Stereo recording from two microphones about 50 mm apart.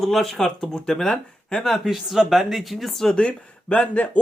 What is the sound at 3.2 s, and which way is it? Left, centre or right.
Speech, left.